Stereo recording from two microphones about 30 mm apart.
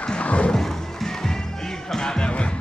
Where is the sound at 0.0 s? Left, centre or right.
Left.